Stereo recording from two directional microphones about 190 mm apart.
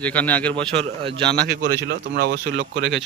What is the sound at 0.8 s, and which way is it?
Speech, 30° right (ahead or behind).